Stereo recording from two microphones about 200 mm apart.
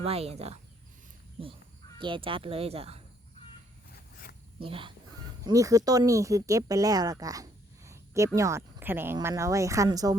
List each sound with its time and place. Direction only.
0.0 s speech: 30° right (ahead or behind)
2.0 s speech: 25° right (ahead or behind)
3.9 s a sound: 50° left (ahead or behind)
4.6 s speech: 25° right (ahead or behind)